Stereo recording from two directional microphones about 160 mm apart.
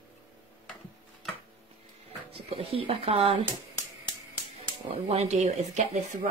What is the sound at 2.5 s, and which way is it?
Speech, 35° right (ahead or behind).